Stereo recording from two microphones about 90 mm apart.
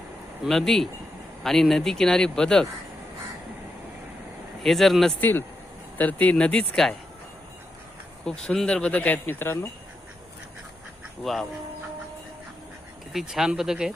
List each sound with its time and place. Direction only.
0.4 s speech: 5° left (ahead or behind)
4.6 s speech: 5° left (ahead or behind)
5.2 s speech: 20° left (ahead or behind)
8.2 s speech: 10° left (ahead or behind); by 9.6 s 25° left (ahead or behind)
11.2 s speech: centre (ahead or behind)
13.1 s speech: 5° right (ahead or behind)